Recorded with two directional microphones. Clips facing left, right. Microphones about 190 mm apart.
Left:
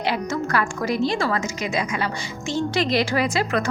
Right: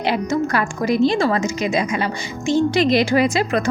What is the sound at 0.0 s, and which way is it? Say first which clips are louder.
A woman's voice: right 5 dB; 20° right (ahead or behind).